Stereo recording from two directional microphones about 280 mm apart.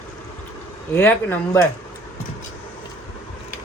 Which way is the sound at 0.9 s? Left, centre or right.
Centre.